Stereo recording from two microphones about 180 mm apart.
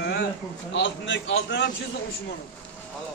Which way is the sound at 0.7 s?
85° left.